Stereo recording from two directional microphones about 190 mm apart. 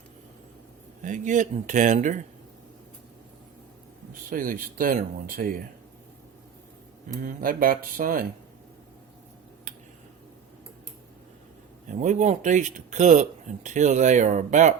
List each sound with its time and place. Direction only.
1.0 s speech: 40° right (ahead or behind)
4.1 s speech: 45° right (ahead or behind)
7.2 s speech: 45° right (ahead or behind)
11.9 s speech: 40° right (ahead or behind)